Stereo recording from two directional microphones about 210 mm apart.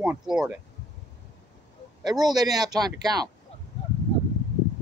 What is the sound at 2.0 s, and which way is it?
Speech, 20° right (ahead or behind).